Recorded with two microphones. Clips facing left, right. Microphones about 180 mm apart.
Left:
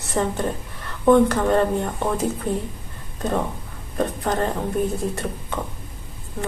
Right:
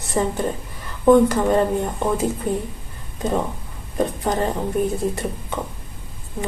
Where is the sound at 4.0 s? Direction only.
15° right (ahead or behind).